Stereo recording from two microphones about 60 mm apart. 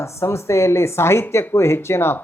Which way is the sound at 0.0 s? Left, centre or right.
Left.